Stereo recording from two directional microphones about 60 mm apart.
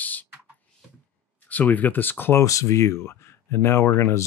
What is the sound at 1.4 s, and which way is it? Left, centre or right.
Speech, left.